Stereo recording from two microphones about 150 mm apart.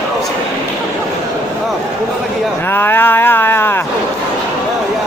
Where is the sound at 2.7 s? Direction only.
15° left (ahead or behind).